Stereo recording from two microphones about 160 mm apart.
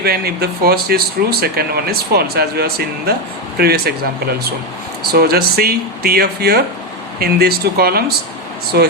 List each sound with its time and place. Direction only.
0.0 s speech: 75° right (ahead or behind)